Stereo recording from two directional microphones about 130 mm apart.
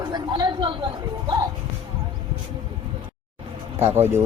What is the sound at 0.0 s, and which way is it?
Chatter, 35° right (ahead or behind).